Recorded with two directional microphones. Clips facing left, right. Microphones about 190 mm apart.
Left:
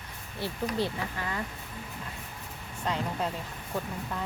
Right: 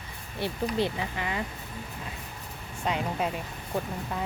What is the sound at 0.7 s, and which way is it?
Speech, 20° right (ahead or behind).